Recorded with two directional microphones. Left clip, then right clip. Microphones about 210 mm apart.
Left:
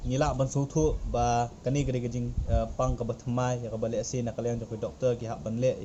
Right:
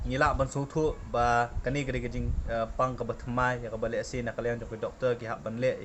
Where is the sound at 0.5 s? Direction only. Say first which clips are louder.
Left 2 dB; 15° right (ahead or behind).